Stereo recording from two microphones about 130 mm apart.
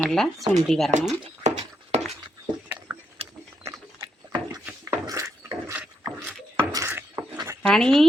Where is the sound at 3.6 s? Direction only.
25° right (ahead or behind).